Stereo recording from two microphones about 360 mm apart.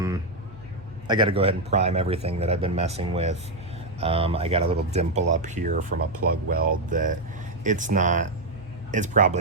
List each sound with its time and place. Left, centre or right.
1.0 s speech: centre